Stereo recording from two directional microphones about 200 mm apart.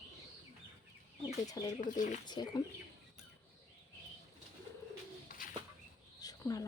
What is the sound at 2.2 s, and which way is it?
Speech, 20° left (ahead or behind).